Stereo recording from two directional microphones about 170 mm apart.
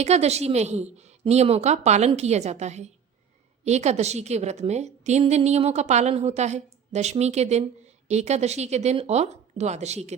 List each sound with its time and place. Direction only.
0.0 s a woman's voice: 40° right (ahead or behind)